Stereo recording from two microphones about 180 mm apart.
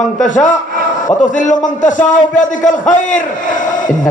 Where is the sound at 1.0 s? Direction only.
45° left (ahead or behind).